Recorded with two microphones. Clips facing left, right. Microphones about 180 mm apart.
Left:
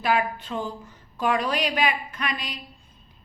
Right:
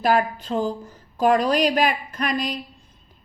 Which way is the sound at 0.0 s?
40° right (ahead or behind).